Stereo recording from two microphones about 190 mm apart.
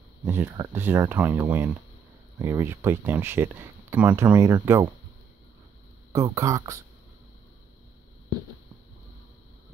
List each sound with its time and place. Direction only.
0.2 s speech: 15° right (ahead or behind)
6.1 s speech: 20° right (ahead or behind)